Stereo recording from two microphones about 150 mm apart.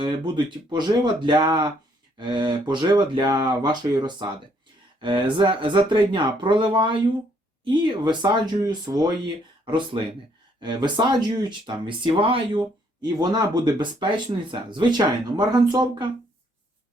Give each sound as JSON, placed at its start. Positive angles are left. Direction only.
{"t": 0.0, "sound": "speech", "side_deg": -30}